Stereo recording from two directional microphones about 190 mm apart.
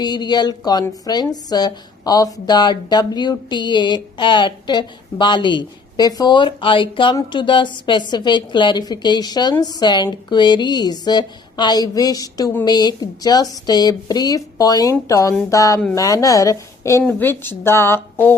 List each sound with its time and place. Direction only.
0.0 s a woman's voice: 20° left (ahead or behind)